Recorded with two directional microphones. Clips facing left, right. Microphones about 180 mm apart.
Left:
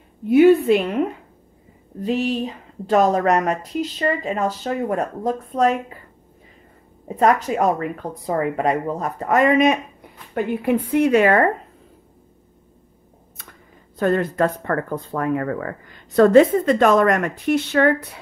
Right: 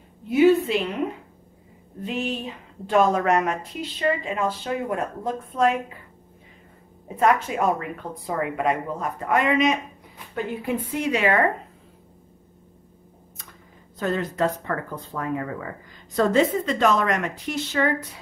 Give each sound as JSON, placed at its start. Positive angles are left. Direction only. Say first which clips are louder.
{"t": 0.3, "sound": "speech", "louder": "left 5 dB", "side_deg": 55}
{"t": 2.0, "sound": "a woman's voice", "louder": "left 7 dB", "side_deg": 35}
{"t": 7.2, "sound": "a woman's voice", "louder": "left 3 dB", "side_deg": 40}
{"t": 10.3, "sound": "speech", "louder": "left 7 dB", "side_deg": 60}
{"t": 13.9, "sound": "speech", "louder": "left 6 dB", "side_deg": 55}